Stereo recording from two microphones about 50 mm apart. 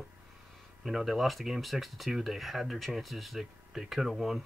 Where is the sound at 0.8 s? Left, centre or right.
Centre.